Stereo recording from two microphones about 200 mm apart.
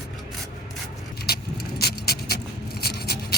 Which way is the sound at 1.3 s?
50° left (ahead or behind).